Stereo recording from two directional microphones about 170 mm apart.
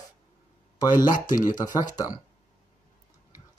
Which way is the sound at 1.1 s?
50° left (ahead or behind).